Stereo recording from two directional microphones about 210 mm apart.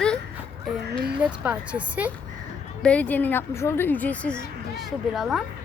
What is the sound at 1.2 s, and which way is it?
Speech, 5° right (ahead or behind).